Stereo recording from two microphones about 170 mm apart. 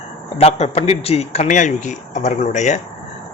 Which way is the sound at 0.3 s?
35° left (ahead or behind).